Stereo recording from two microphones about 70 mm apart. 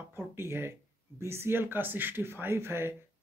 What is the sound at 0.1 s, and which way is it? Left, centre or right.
Speech, right.